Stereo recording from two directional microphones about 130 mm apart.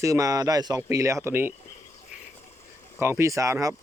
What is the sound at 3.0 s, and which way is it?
Speech, 20° right (ahead or behind).